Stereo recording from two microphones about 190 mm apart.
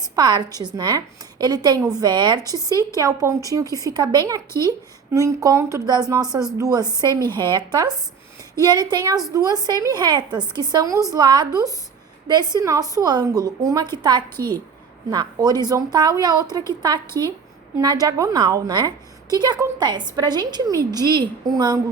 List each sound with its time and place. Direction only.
0.2 s a woman's voice: 20° right (ahead or behind)
2.6 s a woman's voice: 15° left (ahead or behind)
2.9 s a woman's voice: 15° right (ahead or behind)
14.3 s a woman's voice: 10° left (ahead or behind)
15.1 s a woman's voice: 20° right (ahead or behind)
17.1 s a woman's voice: 15° left (ahead or behind)
17.7 s a woman's voice: 20° right (ahead or behind)